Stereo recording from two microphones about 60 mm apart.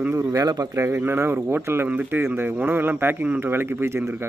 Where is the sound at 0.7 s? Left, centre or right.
Right.